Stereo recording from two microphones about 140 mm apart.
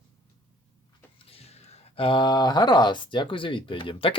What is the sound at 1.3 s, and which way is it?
Speech, 45° left (ahead or behind).